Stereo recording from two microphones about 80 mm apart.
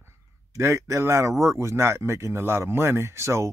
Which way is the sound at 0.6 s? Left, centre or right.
Right.